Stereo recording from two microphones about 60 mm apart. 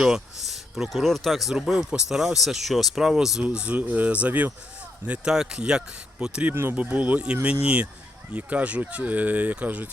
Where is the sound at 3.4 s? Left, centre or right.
Right.